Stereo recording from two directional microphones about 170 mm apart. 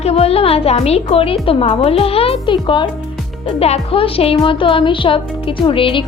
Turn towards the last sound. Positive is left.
turn(degrees=30)  # may be behind; listen again after turning